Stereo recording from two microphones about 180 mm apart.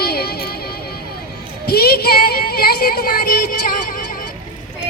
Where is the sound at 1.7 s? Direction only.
60° left (ahead or behind).